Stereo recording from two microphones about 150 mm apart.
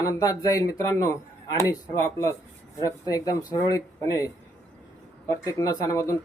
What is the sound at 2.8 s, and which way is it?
Speech, 25° left (ahead or behind).